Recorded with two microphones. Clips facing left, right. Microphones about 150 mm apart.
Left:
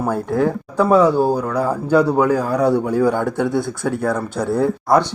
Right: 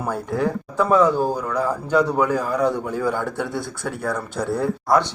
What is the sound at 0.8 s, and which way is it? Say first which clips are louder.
Speech: left 3 dB; 35° left (ahead or behind).